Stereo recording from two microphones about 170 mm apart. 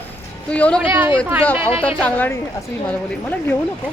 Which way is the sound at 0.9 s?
10° right (ahead or behind).